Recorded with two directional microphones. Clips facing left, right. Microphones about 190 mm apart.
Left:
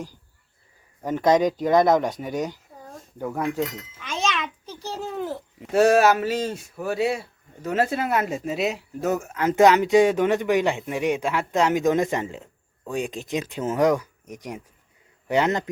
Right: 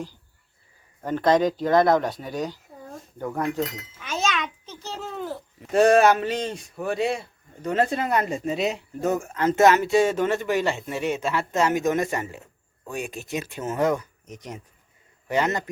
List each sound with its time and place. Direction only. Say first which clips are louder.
1.0 s speech: left 1 dB; 15° left (ahead or behind)
3.2 s speech: left 1 dB; 5° left (ahead or behind)
4.0 s a sound: even; 5° right (ahead or behind)
4.6 s babbling: left 3 dB; 15° left (ahead or behind)
5.7 s speech: even; 5° left (ahead or behind)